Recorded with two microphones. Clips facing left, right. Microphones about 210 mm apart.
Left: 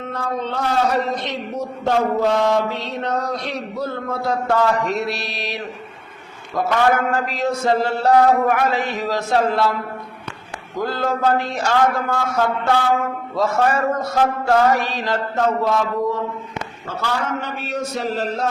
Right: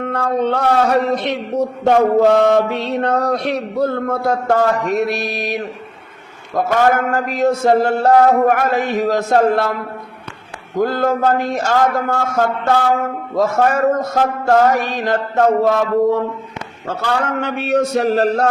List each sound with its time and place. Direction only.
0.0 s a man's voice: 60° right (ahead or behind)
10.8 s a man's voice: 50° right (ahead or behind); by 18.4 s 70° right (ahead or behind)